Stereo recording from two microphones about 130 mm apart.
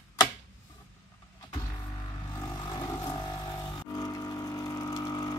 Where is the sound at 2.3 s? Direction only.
25° left (ahead or behind).